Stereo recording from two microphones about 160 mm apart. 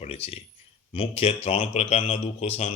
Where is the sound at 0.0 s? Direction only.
40° left (ahead or behind).